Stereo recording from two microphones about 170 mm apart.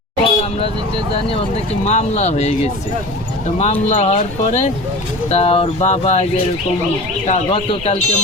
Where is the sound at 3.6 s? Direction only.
40° left (ahead or behind).